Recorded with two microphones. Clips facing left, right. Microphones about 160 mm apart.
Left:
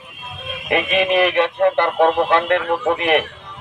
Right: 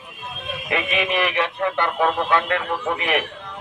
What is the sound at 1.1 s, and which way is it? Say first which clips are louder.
Speech: left 8 dB; 45° left (ahead or behind).